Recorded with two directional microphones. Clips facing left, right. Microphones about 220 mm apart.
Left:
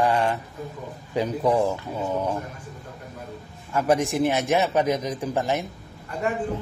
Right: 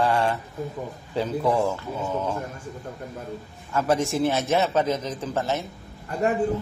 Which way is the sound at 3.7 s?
15° left (ahead or behind).